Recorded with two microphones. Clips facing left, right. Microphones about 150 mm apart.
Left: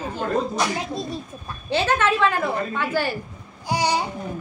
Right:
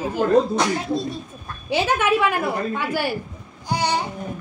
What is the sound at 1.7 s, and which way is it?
A woman's voice, 10° right (ahead or behind).